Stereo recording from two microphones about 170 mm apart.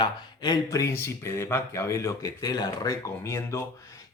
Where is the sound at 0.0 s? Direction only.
25° left (ahead or behind).